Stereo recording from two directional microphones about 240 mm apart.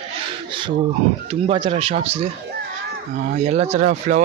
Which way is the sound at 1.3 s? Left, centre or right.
Right.